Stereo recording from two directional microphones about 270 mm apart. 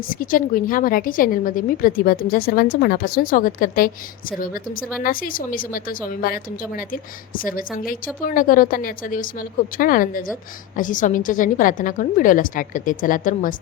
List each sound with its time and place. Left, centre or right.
0.0 s a woman's voice: left